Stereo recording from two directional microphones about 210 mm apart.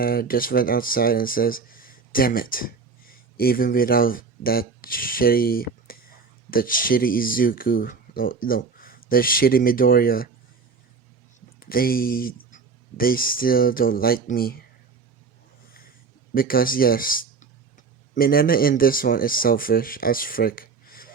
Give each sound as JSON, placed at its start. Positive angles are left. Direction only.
{"t": 0.0, "sound": "speech", "side_deg": 45}
{"t": 11.6, "sound": "speech", "side_deg": 45}
{"t": 16.3, "sound": "speech", "side_deg": 45}